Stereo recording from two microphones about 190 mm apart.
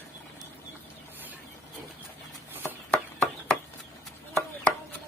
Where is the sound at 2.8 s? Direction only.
5° left (ahead or behind).